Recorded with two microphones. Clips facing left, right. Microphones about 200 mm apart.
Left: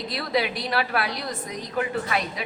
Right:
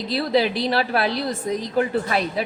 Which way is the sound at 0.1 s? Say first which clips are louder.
Right 6 dB; 30° right (ahead or behind).